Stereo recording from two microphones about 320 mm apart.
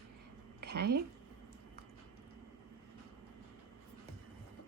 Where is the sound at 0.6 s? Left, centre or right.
Right.